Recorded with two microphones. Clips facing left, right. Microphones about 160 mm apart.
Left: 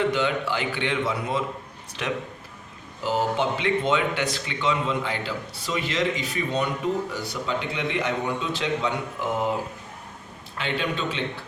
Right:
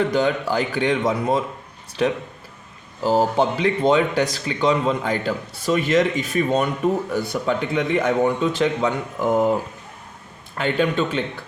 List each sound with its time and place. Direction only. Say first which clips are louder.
0.0 s a man's voice: right 4 dB; 40° right (ahead or behind)
10.6 s speech: right 7 dB; 50° right (ahead or behind)